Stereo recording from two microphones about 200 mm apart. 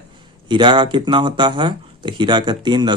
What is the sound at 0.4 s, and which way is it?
Speech, 25° right (ahead or behind).